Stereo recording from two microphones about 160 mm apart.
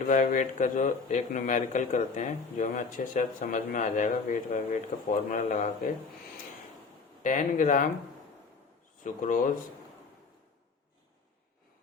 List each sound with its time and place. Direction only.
0.1 s a man's voice: 55° left (ahead or behind)
7.2 s a man's voice: 55° left (ahead or behind)
9.0 s a man's voice: 55° left (ahead or behind)